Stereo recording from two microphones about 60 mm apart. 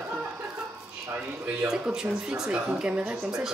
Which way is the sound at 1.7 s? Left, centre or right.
Centre.